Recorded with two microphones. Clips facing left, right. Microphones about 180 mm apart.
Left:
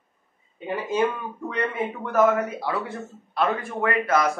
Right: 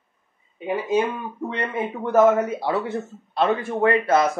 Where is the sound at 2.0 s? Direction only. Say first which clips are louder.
Right 4 dB; 25° right (ahead or behind).